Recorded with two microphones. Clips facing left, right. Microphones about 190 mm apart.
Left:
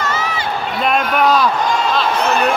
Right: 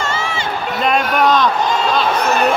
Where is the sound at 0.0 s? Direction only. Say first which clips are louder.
Left 1 dB; 25° right (ahead or behind).